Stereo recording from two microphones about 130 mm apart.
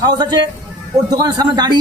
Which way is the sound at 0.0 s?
35° right (ahead or behind).